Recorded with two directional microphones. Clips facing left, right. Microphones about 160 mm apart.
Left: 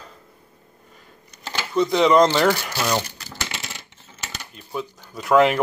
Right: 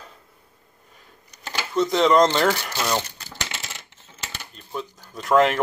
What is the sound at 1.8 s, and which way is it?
Speech, centre (ahead or behind).